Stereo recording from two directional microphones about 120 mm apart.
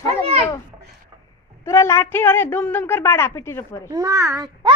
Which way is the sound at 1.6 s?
20° left (ahead or behind).